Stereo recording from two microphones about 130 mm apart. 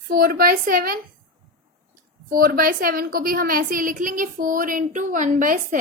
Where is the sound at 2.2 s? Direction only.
90° right.